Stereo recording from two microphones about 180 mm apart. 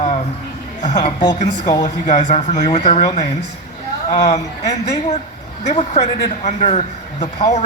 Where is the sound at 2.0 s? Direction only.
40° left (ahead or behind).